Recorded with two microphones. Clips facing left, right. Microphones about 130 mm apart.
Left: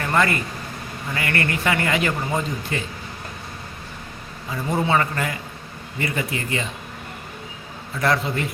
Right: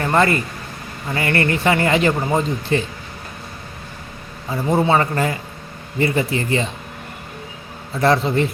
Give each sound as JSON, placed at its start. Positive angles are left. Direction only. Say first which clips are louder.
{"t": 0.0, "sound": "a man's voice", "louder": "right 4 dB", "side_deg": -30}
{"t": 4.7, "sound": "a man's voice", "louder": "right 4 dB", "side_deg": -35}
{"t": 8.0, "sound": "a man's voice", "louder": "right 6 dB", "side_deg": -30}